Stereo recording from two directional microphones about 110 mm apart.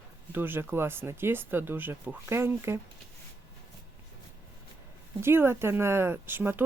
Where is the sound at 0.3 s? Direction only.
20° right (ahead or behind).